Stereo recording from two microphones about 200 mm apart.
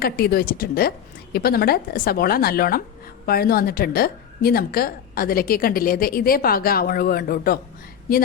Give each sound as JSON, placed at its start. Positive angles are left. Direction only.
{"t": 0.0, "sound": "a woman's voice", "side_deg": 50}